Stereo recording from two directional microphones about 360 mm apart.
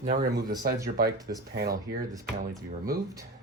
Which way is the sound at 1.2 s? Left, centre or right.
Centre.